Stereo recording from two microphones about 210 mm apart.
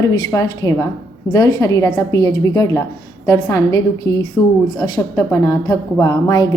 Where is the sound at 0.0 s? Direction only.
15° left (ahead or behind).